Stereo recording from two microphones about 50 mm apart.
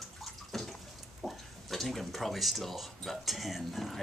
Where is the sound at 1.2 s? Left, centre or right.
Centre.